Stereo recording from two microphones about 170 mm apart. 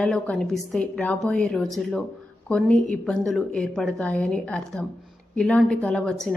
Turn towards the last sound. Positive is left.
turn(degrees=5)  # may be behind; listen again after turning